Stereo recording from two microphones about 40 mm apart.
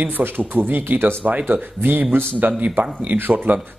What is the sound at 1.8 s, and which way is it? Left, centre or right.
Speech, right.